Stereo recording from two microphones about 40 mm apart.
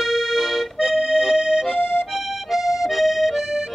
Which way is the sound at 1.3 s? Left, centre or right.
Right.